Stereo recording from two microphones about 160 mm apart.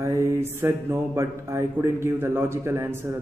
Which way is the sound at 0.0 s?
20° right (ahead or behind).